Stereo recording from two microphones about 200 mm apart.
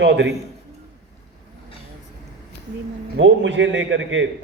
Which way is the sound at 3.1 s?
65° right (ahead or behind).